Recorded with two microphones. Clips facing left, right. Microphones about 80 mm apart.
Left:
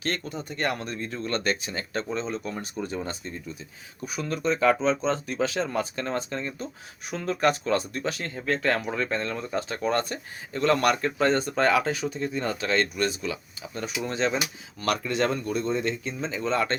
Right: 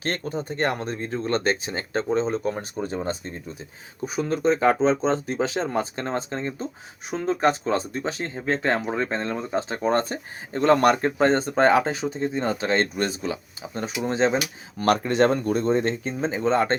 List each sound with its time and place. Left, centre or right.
0.0 s speech: right